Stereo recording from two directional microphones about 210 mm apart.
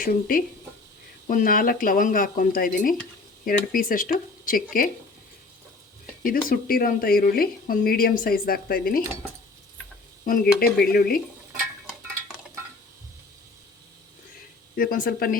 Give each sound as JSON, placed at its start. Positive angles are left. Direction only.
{"t": 0.0, "sound": "speech", "side_deg": 40}
{"t": 6.2, "sound": "speech", "side_deg": 45}
{"t": 10.2, "sound": "speech", "side_deg": 45}
{"t": 14.8, "sound": "speech", "side_deg": 45}